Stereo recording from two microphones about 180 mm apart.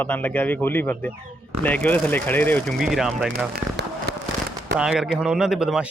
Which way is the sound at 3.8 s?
70° right (ahead or behind).